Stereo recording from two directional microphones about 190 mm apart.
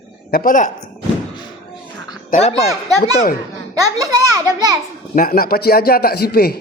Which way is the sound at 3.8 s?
20° right (ahead or behind).